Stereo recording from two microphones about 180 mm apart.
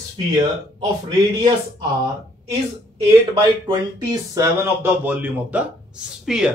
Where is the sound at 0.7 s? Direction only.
25° right (ahead or behind).